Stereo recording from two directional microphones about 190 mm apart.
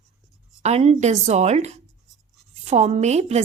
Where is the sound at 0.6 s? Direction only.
35° right (ahead or behind).